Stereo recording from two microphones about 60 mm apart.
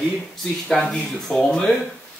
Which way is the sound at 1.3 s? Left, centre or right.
Centre.